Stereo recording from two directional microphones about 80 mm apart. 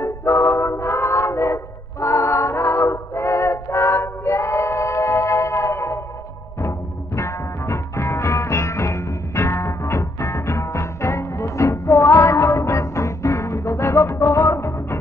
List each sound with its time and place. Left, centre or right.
0.0 s music: left
7.2 s music: left